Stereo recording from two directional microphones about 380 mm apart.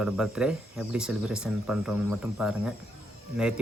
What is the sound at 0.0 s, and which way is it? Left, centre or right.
Speech, centre.